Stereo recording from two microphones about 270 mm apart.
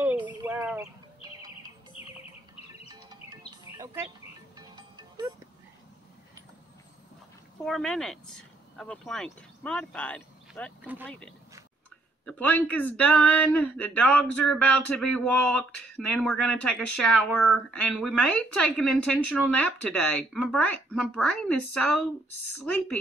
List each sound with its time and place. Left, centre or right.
0.0 s bird: centre
2.9 s music: centre
7.6 s speech: centre
12.3 s speech: centre
21.5 s a woman's voice: left
22.6 s speech: centre